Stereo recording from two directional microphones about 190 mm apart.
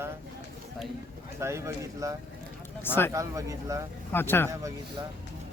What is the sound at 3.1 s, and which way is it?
Speech, 15° right (ahead or behind).